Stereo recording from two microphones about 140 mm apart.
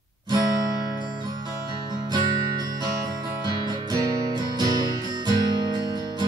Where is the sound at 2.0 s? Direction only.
30° right (ahead or behind).